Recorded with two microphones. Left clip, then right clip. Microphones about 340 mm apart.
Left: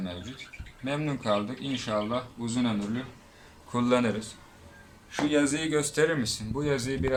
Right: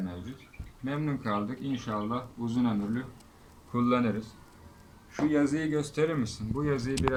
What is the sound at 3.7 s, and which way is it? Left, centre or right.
Speech, centre.